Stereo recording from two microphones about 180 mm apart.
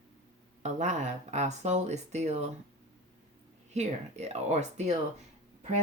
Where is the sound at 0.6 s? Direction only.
40° right (ahead or behind).